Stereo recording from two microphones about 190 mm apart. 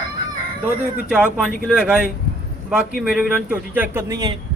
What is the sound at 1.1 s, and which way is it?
A man's voice, 5° right (ahead or behind).